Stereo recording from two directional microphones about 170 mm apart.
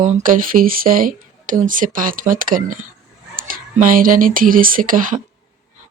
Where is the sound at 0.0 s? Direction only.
50° right (ahead or behind).